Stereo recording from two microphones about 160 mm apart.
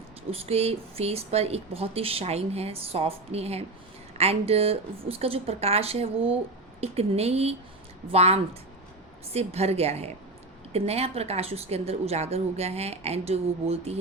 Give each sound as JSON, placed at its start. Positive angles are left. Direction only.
{"t": 0.3, "sound": "speech", "side_deg": -40}